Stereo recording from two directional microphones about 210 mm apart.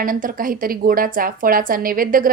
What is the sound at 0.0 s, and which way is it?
A woman's voice, 40° right (ahead or behind).